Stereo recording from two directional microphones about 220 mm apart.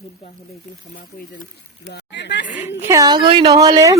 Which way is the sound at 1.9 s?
50° left (ahead or behind).